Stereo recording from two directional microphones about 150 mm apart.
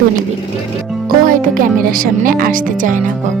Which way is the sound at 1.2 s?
65° right (ahead or behind).